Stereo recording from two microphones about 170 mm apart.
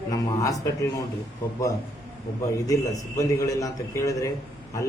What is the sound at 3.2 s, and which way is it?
A man's voice, 20° left (ahead or behind).